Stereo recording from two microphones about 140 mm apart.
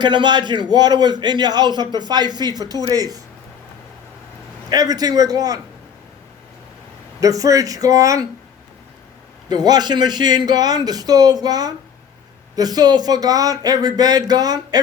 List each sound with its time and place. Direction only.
0.0 s a man's voice: 30° right (ahead or behind)
4.7 s a man's voice: 30° right (ahead or behind)
7.2 s a man's voice: 25° right (ahead or behind)
9.5 s a man's voice: 30° right (ahead or behind)